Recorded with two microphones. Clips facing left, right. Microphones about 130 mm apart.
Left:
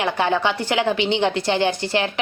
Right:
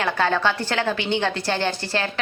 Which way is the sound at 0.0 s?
15° left (ahead or behind).